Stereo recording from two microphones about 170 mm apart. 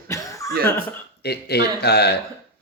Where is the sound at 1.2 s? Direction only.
70° left (ahead or behind).